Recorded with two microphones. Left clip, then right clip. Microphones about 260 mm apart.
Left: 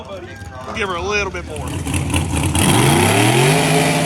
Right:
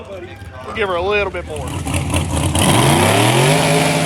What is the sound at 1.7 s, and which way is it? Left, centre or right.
Vehicle, centre.